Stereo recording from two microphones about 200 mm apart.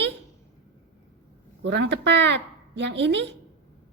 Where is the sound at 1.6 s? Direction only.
60° right (ahead or behind).